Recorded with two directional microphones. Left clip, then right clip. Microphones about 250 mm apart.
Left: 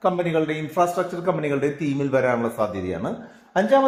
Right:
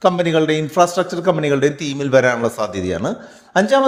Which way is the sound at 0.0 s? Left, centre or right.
Right.